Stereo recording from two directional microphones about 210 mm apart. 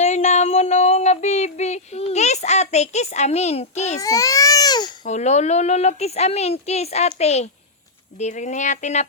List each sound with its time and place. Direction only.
0.0 s female singing: 35° left (ahead or behind)
4.0 s speech: 15° left (ahead or behind)
5.0 s speech: 35° left (ahead or behind)